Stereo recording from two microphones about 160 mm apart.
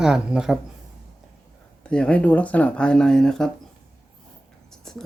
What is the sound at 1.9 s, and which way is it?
Speech, 5° left (ahead or behind).